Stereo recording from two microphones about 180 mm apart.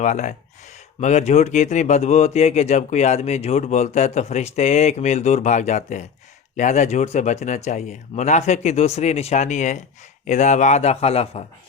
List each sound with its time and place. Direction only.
0.0 s speech: 40° left (ahead or behind)